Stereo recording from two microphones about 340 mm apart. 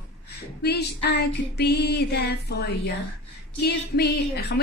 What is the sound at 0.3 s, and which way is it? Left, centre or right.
A woman's voice, left.